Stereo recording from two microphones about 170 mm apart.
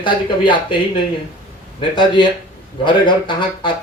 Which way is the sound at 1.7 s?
25° left (ahead or behind).